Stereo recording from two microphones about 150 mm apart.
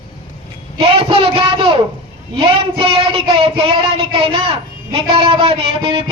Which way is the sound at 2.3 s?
35° right (ahead or behind).